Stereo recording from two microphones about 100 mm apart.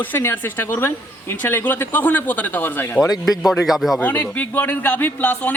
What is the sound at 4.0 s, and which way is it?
A man's voice, 15° left (ahead or behind).